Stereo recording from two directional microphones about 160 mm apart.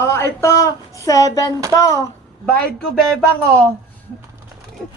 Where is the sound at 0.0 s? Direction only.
15° left (ahead or behind).